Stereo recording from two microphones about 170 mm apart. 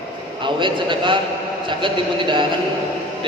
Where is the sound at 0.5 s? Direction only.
30° right (ahead or behind).